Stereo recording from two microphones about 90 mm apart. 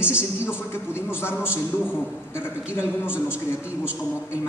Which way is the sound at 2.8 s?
15° right (ahead or behind).